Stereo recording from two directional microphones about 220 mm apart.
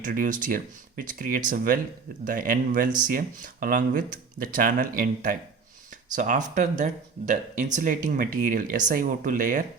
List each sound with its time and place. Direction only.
0.0 s speech: 40° right (ahead or behind)